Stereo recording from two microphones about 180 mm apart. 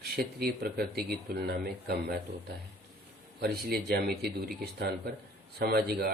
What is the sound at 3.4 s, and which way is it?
Speech, 60° right (ahead or behind).